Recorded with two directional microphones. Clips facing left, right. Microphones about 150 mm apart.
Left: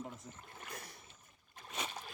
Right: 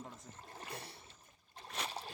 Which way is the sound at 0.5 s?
30° right (ahead or behind).